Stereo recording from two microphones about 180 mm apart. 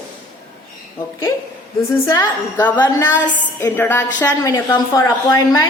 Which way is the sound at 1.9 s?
15° left (ahead or behind).